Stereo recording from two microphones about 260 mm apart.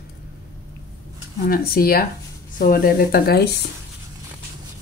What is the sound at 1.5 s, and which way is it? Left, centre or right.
Speech, left.